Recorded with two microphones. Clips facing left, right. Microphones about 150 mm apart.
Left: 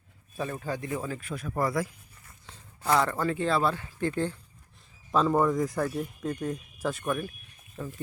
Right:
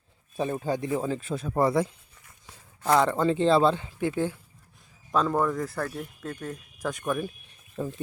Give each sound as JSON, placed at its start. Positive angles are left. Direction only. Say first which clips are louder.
{"t": 0.3, "sound": "speech", "louder": "right 5 dB", "side_deg": -25}
{"t": 5.1, "sound": "speech", "louder": "left 1 dB", "side_deg": 5}
{"t": 7.8, "sound": "speech", "louder": "right 5 dB", "side_deg": -25}